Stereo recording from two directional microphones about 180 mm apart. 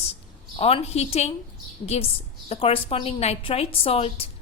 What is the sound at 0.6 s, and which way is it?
A woman's voice, 35° left (ahead or behind).